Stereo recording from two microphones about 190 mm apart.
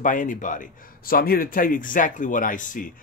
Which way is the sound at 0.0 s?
45° left (ahead or behind).